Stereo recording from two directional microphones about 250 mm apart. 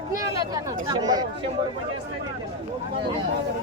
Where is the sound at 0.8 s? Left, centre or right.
Centre.